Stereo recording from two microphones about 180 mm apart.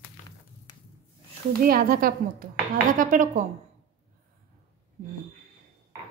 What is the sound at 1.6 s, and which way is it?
A woman's voice, 55° right (ahead or behind).